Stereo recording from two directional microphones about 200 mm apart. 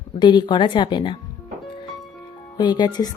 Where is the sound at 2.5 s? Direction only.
20° left (ahead or behind).